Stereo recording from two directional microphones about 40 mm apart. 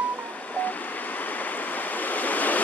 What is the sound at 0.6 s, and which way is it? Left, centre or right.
Waves, left.